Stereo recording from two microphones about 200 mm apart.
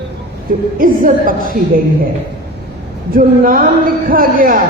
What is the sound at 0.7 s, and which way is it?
Speech, 45° right (ahead or behind).